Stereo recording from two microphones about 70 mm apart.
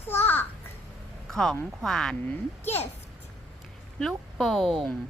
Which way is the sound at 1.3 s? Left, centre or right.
Centre.